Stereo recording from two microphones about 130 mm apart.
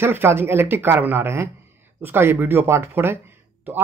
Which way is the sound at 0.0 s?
20° right (ahead or behind).